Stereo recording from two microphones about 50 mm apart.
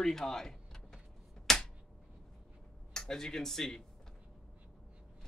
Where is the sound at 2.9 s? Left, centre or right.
Centre.